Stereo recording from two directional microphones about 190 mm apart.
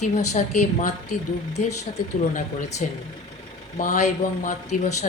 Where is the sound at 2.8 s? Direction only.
40° left (ahead or behind).